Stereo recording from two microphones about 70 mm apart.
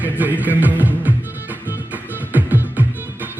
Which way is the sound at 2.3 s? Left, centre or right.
Right.